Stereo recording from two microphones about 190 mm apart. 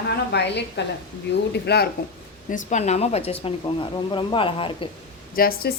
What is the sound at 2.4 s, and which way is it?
Speech, 40° left (ahead or behind).